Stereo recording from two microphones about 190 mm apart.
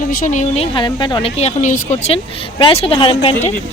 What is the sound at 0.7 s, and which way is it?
Speech, 25° left (ahead or behind).